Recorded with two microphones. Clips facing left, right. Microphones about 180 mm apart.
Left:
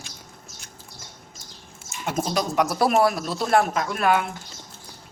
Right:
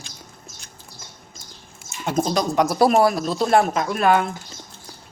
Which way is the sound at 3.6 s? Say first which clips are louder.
Right 3 dB; centre (ahead or behind).